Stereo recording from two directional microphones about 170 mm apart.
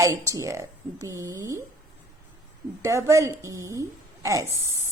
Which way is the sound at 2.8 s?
15° right (ahead or behind).